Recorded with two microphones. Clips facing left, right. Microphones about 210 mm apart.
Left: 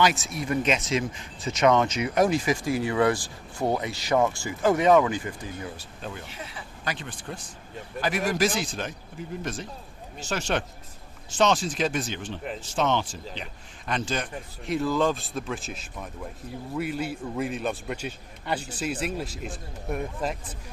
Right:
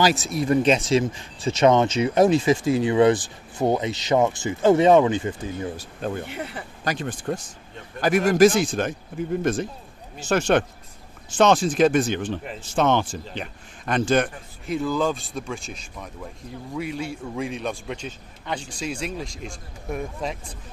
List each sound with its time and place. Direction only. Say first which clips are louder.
0.0 s speech: right 4 dB; 35° right (ahead or behind)
5.8 s speech: right 9 dB; 50° right (ahead or behind)
6.8 s a man's voice: right 7 dB; 45° right (ahead or behind)
14.7 s a man's voice: right 1 dB; centre (ahead or behind)